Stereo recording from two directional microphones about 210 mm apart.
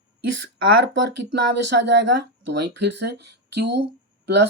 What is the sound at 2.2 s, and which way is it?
Speech, 55° right (ahead or behind).